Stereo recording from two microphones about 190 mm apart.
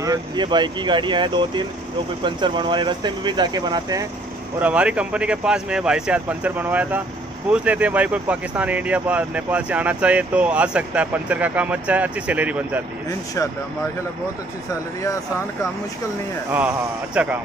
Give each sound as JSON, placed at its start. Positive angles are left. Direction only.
{"t": 0.0, "sound": "speech", "side_deg": -20}
{"t": 4.6, "sound": "speech", "side_deg": -5}
{"t": 16.5, "sound": "speech", "side_deg": -5}